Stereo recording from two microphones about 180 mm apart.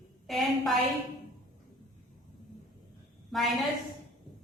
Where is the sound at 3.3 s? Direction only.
Centre (ahead or behind).